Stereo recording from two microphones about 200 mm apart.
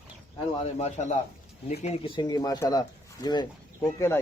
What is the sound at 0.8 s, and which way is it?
A man's voice, 35° left (ahead or behind).